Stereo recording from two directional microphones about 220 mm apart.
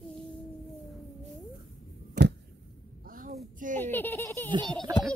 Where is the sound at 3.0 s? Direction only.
40° right (ahead or behind).